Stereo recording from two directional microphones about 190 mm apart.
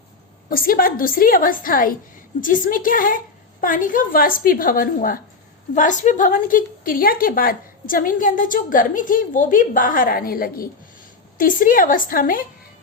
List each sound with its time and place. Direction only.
0.5 s a woman's voice: 50° left (ahead or behind)